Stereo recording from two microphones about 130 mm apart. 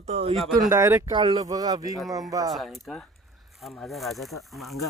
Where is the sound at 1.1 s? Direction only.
35° right (ahead or behind).